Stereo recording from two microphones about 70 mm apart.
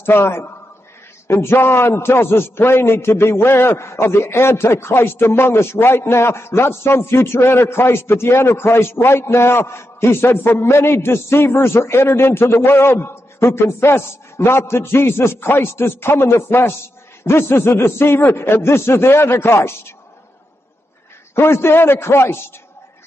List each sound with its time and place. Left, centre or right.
0.0 s a man's voice: left
21.4 s a man's voice: left